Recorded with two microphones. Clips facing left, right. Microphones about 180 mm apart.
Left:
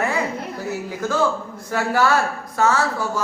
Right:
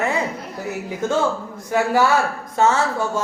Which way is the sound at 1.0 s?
25° right (ahead or behind).